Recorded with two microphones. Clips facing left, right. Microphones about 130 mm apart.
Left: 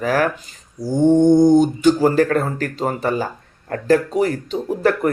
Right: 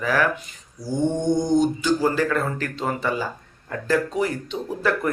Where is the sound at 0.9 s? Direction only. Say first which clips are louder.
Left 9 dB; 55° left (ahead or behind).